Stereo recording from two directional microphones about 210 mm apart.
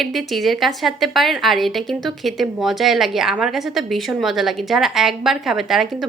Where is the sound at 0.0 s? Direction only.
Centre (ahead or behind).